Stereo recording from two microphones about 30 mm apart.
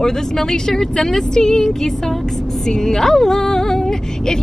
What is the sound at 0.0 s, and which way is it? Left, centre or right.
Speech, centre.